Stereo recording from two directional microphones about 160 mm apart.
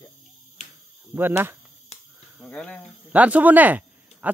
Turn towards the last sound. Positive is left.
turn(degrees=-10)  # may be behind; listen again after turning